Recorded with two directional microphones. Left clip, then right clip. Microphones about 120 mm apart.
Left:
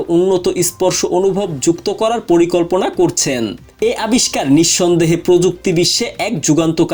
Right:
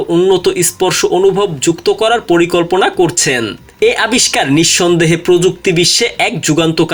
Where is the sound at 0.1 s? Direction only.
30° left (ahead or behind).